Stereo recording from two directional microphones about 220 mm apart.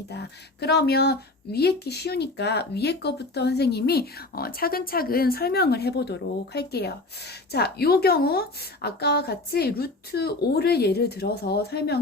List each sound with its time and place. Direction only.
0.1 s speech: 50° left (ahead or behind)